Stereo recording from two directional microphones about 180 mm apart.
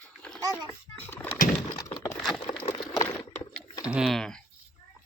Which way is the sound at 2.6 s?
25° left (ahead or behind).